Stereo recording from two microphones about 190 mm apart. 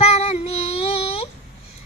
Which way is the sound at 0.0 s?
35° left (ahead or behind).